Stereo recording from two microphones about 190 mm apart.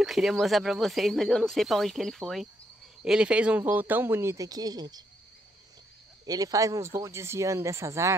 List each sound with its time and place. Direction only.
0.0 s a man's voice: centre (ahead or behind); by 5.0 s 20° right (ahead or behind)
6.2 s a man's voice: 20° right (ahead or behind)